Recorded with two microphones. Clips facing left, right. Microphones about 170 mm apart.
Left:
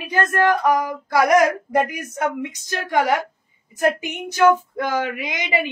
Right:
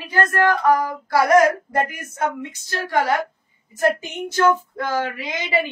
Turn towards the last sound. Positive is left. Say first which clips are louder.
# right 1 dB
turn(degrees=15)  # may be behind; listen again after turning